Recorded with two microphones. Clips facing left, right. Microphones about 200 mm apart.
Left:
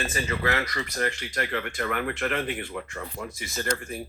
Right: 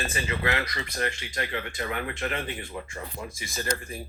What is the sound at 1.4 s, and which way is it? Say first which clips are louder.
Speech: left 2 dB; 60° left (ahead or behind).